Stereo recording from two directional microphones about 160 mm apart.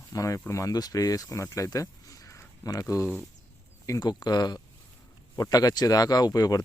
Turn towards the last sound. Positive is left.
turn(degrees=25)  # may be behind; listen again after turning